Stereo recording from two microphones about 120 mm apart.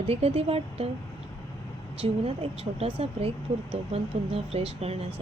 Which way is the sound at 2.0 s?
50° right (ahead or behind).